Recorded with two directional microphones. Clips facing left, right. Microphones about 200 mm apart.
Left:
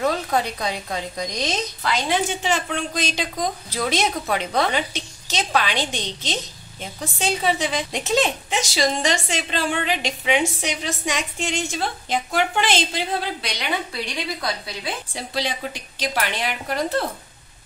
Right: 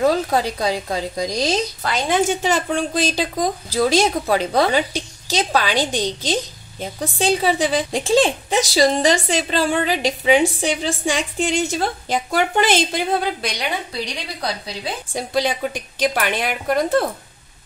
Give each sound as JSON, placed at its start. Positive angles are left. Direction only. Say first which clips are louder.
{"t": 0.0, "sound": "speech", "louder": "right 4 dB", "side_deg": -35}
{"t": 2.0, "sound": "speech", "louder": "right 6 dB", "side_deg": -45}
{"t": 15.1, "sound": "a woman's voice", "louder": "right 8 dB", "side_deg": -50}